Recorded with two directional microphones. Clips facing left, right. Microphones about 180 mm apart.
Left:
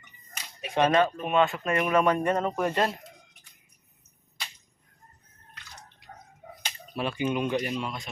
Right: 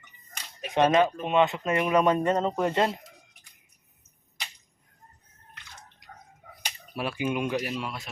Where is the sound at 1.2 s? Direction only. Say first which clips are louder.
Right 1 dB; 20° right (ahead or behind).